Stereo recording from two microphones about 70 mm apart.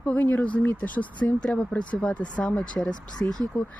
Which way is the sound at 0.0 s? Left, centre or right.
Left.